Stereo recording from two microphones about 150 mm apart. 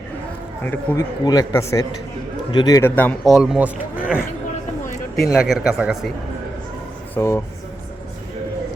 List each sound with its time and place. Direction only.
0.6 s speech: 15° left (ahead or behind)
1.2 s a man's voice: 25° left (ahead or behind)
2.9 s speech: 10° left (ahead or behind)
3.2 s speech: centre (ahead or behind)
5.3 s speech: centre (ahead or behind)
7.2 s a man's voice: 20° left (ahead or behind)